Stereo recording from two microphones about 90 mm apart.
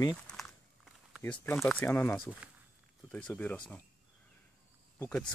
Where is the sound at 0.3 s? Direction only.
Centre (ahead or behind).